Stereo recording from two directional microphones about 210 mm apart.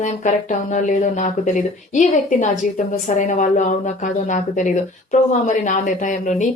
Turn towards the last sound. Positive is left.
turn(degrees=35)  # may be behind; listen again after turning